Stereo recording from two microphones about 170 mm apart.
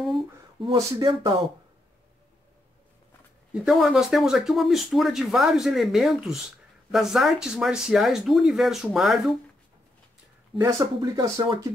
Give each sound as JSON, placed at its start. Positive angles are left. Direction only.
{"t": 0.7, "sound": "speech", "side_deg": -20}
{"t": 3.6, "sound": "speech", "side_deg": -5}
{"t": 10.6, "sound": "speech", "side_deg": -20}